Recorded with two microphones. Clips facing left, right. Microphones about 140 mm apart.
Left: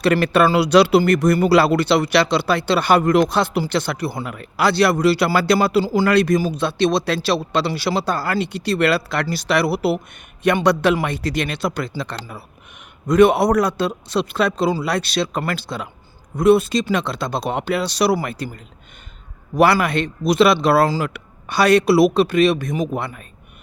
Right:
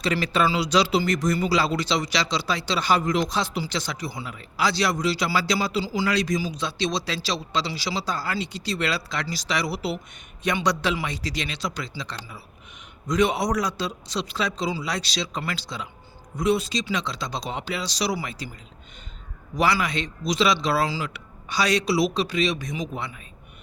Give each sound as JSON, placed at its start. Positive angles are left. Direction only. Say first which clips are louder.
{"t": 0.0, "sound": "speech", "louder": "left 8 dB", "side_deg": 60}
{"t": 19.5, "sound": "speech", "louder": "left 8 dB", "side_deg": 60}